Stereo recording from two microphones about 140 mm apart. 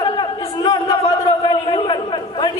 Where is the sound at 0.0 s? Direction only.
35° left (ahead or behind).